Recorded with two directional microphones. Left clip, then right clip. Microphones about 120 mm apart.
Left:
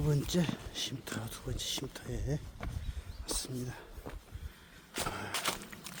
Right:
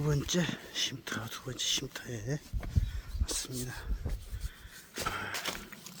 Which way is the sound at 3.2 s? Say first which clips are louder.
Right 1 dB; 15° left (ahead or behind).